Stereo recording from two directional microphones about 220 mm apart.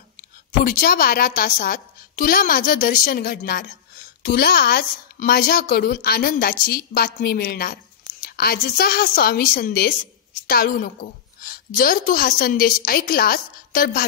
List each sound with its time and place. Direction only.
0.5 s a woman's voice: 40° left (ahead or behind)